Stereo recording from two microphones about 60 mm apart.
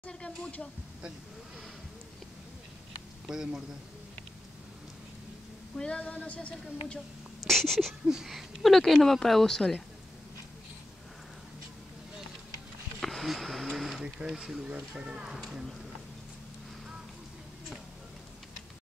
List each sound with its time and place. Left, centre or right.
0.0 s speech: centre
3.3 s speech: centre
5.8 s a sound: centre
7.4 s speech: centre
13.0 s speech: centre
14.0 s speech: centre